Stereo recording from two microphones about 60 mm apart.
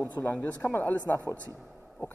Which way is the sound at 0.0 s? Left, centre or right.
Left.